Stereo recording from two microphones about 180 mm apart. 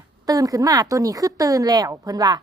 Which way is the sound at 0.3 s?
20° right (ahead or behind).